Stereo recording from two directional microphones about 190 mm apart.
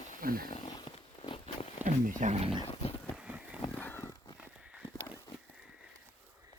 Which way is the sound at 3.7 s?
10° left (ahead or behind).